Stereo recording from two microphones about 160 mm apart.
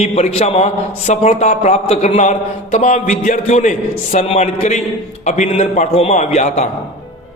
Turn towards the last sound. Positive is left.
turn(degrees=45)  # may be behind; listen again after turning